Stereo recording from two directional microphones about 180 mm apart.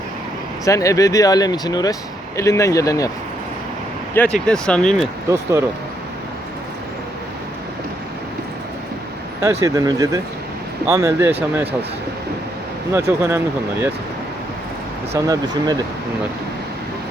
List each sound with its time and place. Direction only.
0.6 s speech: 20° left (ahead or behind)
4.1 s speech: 10° left (ahead or behind)
5.3 s speech: 15° right (ahead or behind)
9.4 s speech: 15° right (ahead or behind)
12.9 s speech: 15° right (ahead or behind)
15.1 s speech: 20° right (ahead or behind)